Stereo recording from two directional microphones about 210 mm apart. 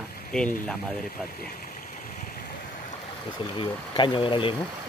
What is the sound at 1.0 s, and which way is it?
Stream, 45° left (ahead or behind).